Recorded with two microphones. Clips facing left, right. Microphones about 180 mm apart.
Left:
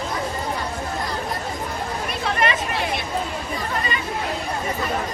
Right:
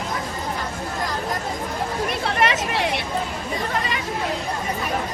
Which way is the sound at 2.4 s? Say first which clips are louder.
Right 2 dB; 75° right (ahead or behind).